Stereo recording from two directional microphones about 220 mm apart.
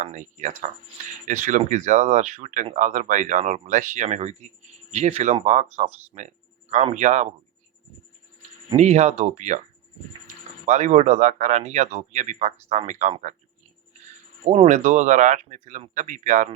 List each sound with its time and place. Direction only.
0.0 s speech: 35° right (ahead or behind)
8.4 s speech: 30° right (ahead or behind)
10.7 s speech: 30° right (ahead or behind)
14.4 s speech: 30° right (ahead or behind)